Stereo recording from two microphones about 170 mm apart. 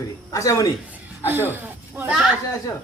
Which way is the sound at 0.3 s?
20° left (ahead or behind).